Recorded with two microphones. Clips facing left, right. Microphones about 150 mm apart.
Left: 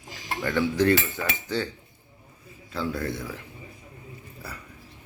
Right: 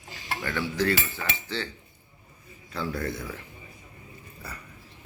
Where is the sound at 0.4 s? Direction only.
20° left (ahead or behind).